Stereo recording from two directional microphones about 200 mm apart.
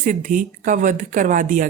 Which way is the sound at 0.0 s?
40° right (ahead or behind).